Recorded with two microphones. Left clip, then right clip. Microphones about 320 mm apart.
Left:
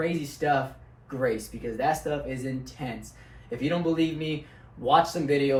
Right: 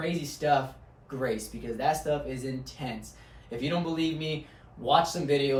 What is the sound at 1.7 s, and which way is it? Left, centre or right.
Speech, centre.